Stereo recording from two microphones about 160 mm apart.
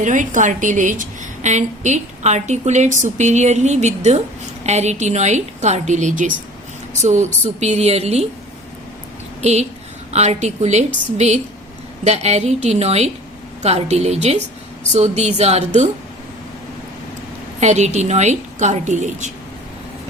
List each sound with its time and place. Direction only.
0.0 s a woman's voice: 50° right (ahead or behind)
9.4 s a woman's voice: 45° right (ahead or behind)
17.6 s a woman's voice: 45° right (ahead or behind)